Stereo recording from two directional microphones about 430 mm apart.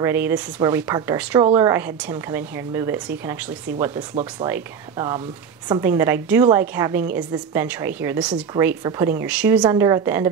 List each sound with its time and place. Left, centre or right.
0.0 s a woman's voice: centre